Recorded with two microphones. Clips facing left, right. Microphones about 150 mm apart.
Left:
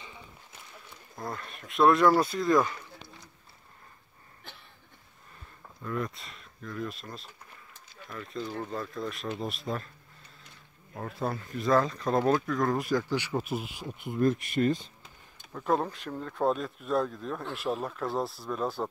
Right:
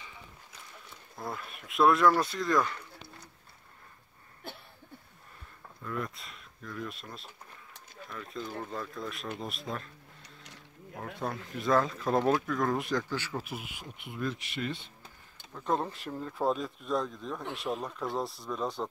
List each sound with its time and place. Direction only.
1.1 s speech: 5° right (ahead or behind)
5.9 s speech: centre (ahead or behind)
11.0 s speech: centre (ahead or behind)
13.1 s speech: 15° left (ahead or behind)
14.0 s speech: 45° left (ahead or behind)
15.5 s speech: 5° left (ahead or behind)